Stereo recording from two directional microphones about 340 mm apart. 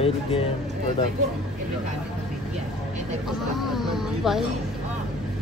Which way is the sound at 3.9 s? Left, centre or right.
Centre.